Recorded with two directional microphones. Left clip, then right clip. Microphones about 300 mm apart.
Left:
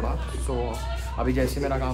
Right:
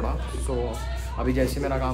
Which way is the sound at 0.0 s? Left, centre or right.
Centre.